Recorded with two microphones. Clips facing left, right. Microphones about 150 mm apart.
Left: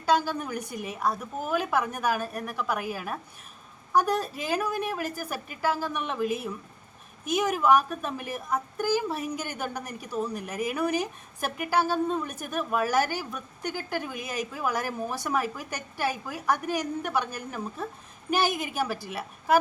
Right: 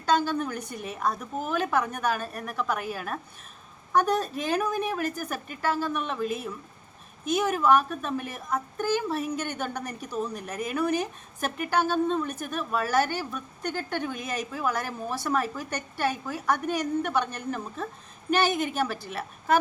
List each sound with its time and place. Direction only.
0.0 s a woman's voice: 10° left (ahead or behind)